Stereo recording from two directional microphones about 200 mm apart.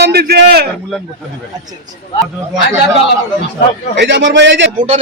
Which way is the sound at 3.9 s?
60° right (ahead or behind).